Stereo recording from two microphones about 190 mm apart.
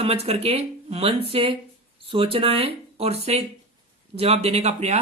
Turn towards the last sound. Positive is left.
turn(degrees=-35)  # may be behind; listen again after turning